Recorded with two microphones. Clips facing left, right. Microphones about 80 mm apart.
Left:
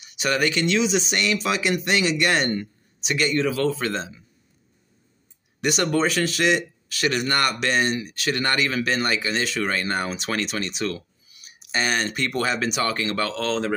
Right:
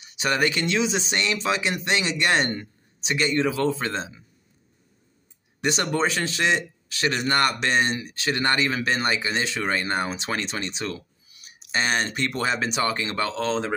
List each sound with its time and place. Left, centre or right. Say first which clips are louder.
0.0 s speech: left 1 dB; right
5.6 s speech: left 2 dB; right